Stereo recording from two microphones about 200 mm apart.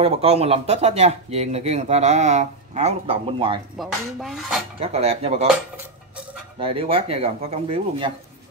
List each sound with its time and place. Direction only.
0.0 s speech: 30° right (ahead or behind)
3.7 s dishes: centre (ahead or behind)
4.7 s speech: 30° right (ahead or behind)
6.6 s speech: 30° right (ahead or behind)